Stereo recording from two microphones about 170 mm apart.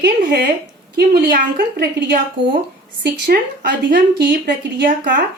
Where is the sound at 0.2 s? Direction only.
55° right (ahead or behind).